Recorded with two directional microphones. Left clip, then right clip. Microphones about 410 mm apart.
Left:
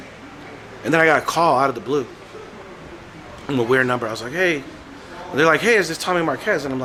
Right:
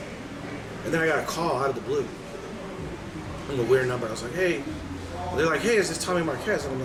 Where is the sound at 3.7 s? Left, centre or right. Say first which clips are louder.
Left 5 dB; left.